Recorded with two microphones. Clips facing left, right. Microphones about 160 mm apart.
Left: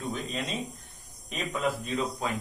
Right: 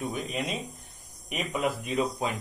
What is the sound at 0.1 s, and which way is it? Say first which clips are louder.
Speech: right 1 dB; 15° right (ahead or behind).